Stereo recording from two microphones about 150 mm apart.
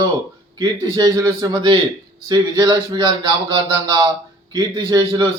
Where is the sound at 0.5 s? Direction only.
25° right (ahead or behind).